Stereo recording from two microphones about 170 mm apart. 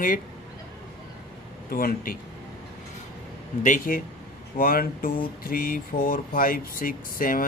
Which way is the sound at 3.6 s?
55° left (ahead or behind).